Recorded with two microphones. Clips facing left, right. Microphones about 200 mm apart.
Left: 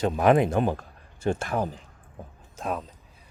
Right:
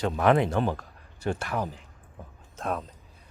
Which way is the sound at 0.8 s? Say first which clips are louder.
Left 3 dB; 25° left (ahead or behind).